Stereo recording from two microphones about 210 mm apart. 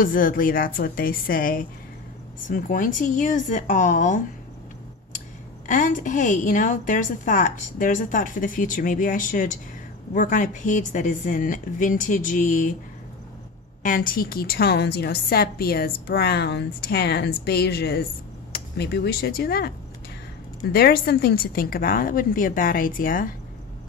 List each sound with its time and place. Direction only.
0.0 s a woman's voice: 40° left (ahead or behind)
5.7 s a woman's voice: 40° left (ahead or behind)
13.8 s a woman's voice: 40° left (ahead or behind)
20.7 s a woman's voice: 45° left (ahead or behind)